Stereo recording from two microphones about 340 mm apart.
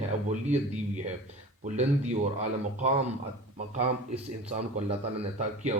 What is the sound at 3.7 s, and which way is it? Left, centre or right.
A man's voice, centre.